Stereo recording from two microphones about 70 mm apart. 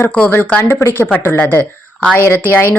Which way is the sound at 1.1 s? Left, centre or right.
Left.